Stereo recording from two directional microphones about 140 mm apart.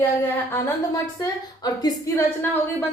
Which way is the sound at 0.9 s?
25° left (ahead or behind).